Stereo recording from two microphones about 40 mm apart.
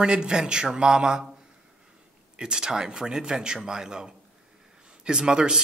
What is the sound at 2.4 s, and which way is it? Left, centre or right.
A woman's voice, centre.